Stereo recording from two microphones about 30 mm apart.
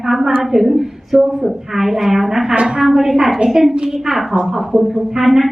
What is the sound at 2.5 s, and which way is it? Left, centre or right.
Speech, right.